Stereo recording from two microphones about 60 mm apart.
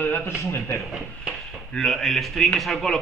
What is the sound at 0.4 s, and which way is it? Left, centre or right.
Speech, left.